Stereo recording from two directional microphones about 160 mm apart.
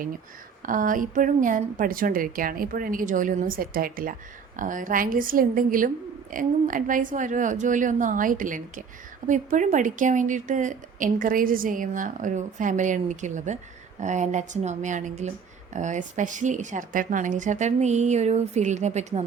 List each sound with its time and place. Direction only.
0.6 s a woman's voice: 55° right (ahead or behind)